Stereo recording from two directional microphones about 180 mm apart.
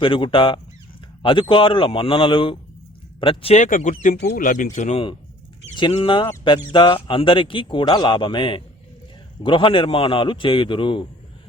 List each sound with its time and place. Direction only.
0.0 s speech: 30° left (ahead or behind)